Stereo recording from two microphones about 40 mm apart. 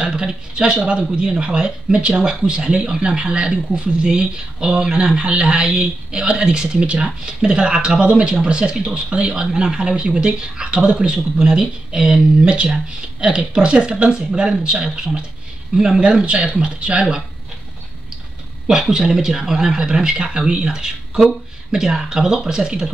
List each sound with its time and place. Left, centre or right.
0.0 s speech: right
16.0 s speech: right
18.7 s speech: centre